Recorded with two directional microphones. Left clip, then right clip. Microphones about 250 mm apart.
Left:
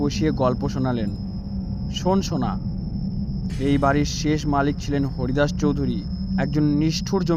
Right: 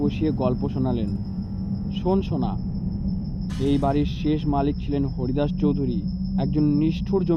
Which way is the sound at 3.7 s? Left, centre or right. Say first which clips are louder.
Left 3 dB; left.